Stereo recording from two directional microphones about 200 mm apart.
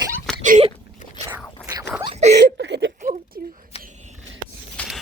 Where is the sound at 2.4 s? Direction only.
60° right (ahead or behind).